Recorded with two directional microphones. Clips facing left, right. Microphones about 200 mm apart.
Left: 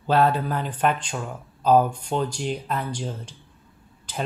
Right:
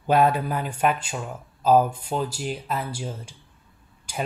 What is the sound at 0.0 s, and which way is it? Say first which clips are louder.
Speech: even; 15° right (ahead or behind).